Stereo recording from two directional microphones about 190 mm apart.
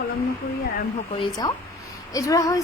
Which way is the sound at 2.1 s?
20° left (ahead or behind).